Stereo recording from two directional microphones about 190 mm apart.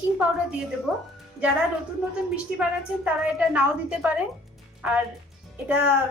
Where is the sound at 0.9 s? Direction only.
5° right (ahead or behind).